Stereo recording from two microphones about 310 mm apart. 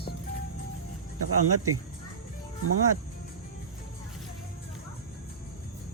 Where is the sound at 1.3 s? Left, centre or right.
Right.